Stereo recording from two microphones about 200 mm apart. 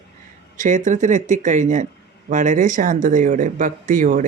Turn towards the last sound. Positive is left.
turn(degrees=-40)  # may be behind; listen again after turning